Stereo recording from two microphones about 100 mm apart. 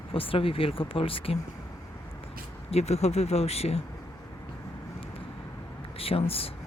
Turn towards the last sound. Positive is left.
turn(degrees=70)  # may be behind; listen again after turning